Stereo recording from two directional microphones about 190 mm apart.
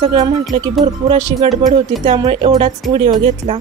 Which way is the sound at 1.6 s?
35° right (ahead or behind).